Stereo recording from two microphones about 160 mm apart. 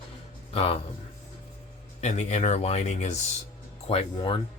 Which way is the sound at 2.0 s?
45° left (ahead or behind).